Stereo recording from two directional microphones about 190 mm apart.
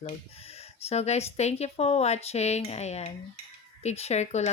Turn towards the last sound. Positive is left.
turn(degrees=35)  # may be behind; listen again after turning